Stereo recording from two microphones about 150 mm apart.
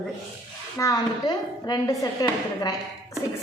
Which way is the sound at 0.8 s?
25° left (ahead or behind).